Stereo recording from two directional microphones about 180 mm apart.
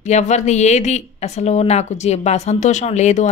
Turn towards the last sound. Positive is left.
turn(degrees=40)  # may be behind; listen again after turning